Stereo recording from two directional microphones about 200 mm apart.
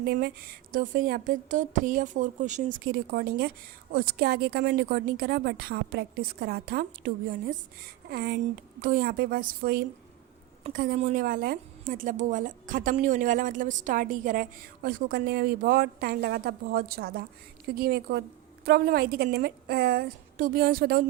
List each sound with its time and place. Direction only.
0.0 s a woman's voice: 50° right (ahead or behind)